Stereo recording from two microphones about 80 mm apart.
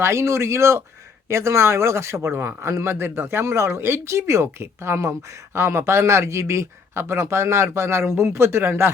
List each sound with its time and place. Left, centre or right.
0.0 s a man's voice: right